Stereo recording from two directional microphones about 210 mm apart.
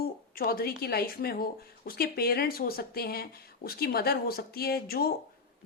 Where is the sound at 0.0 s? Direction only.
45° left (ahead or behind).